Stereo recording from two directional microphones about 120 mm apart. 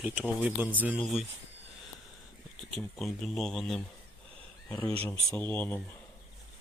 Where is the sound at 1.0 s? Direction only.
Centre (ahead or behind).